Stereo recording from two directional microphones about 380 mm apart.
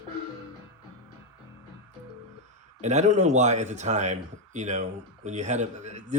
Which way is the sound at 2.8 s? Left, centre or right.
Centre.